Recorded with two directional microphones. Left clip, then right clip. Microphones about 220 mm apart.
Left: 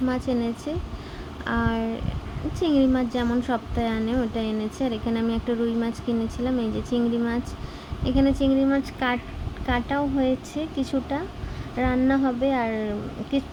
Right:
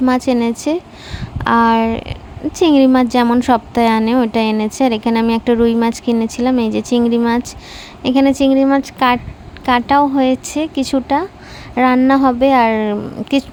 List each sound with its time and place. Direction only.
0.0 s speech: 45° right (ahead or behind)